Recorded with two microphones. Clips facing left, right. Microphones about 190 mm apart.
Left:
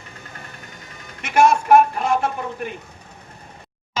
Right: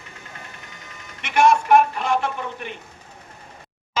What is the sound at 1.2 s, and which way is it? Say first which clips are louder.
Speech: left 1 dB; 45° left (ahead or behind).